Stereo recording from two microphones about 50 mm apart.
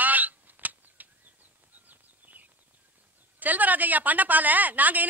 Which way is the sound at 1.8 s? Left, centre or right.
Right.